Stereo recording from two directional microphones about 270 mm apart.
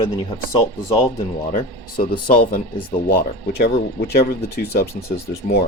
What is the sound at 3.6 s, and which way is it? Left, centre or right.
Speech, left.